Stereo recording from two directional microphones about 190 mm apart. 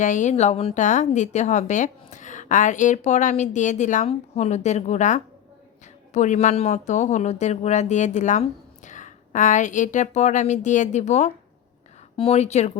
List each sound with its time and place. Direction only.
0.0 s speech: 40° left (ahead or behind)